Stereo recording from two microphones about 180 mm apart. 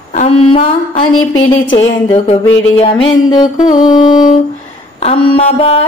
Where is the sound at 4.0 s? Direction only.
45° left (ahead or behind).